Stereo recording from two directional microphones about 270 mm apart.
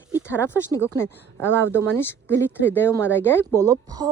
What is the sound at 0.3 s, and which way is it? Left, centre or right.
Speech, centre.